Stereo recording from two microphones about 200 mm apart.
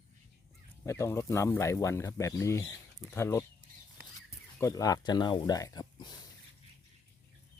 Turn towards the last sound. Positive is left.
turn(degrees=20)  # may be behind; listen again after turning